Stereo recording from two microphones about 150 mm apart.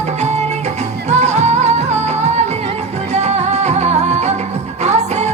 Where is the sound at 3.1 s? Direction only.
45° right (ahead or behind).